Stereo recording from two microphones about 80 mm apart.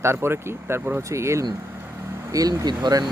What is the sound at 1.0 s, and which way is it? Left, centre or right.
Speech, right.